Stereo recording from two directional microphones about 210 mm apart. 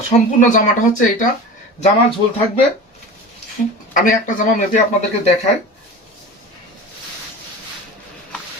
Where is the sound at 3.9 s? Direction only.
40° left (ahead or behind).